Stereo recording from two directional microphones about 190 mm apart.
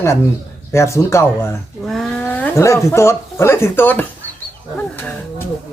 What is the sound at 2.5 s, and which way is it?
Speech, 15° left (ahead or behind).